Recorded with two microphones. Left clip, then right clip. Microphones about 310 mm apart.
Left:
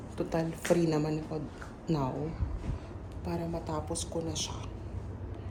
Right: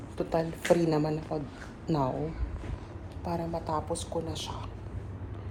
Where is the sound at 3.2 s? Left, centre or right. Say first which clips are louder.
Right 3 dB; centre.